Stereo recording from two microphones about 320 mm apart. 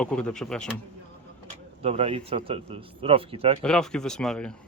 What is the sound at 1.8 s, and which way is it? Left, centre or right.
Speech, centre.